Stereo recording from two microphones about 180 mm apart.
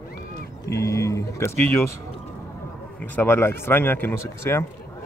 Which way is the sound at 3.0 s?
10° left (ahead or behind).